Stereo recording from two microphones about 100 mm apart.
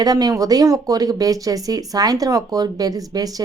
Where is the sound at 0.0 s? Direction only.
40° right (ahead or behind).